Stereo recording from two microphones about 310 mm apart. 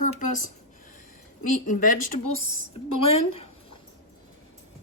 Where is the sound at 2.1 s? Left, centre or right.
Left.